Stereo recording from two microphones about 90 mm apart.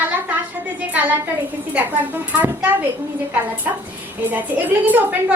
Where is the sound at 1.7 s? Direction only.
20° right (ahead or behind).